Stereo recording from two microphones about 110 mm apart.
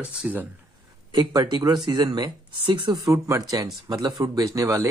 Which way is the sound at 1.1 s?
35° right (ahead or behind).